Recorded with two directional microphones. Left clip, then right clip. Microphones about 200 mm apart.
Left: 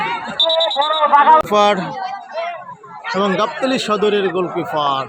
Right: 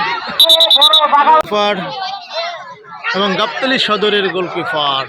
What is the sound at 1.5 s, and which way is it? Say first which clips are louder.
Speech: left 1 dB; 5° left (ahead or behind).